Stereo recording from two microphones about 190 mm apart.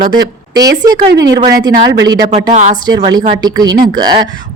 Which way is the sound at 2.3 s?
40° right (ahead or behind).